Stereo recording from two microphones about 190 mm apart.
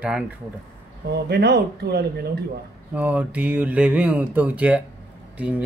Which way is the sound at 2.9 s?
10° right (ahead or behind).